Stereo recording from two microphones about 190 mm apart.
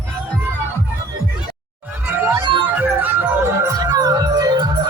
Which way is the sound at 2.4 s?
25° right (ahead or behind).